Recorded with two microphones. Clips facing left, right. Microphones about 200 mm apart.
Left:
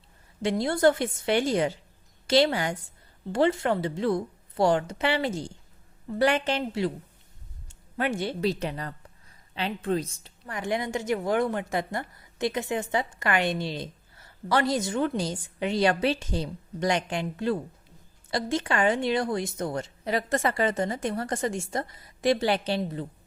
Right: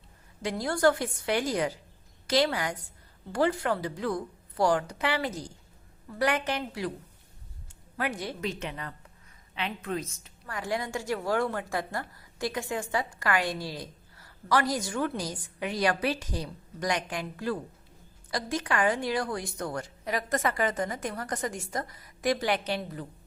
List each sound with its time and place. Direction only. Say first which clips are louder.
0.4 s a woman's voice: left 3 dB; 25° left (ahead or behind)